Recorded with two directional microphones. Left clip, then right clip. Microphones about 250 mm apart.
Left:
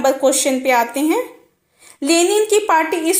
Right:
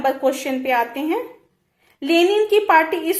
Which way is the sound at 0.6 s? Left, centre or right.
Left.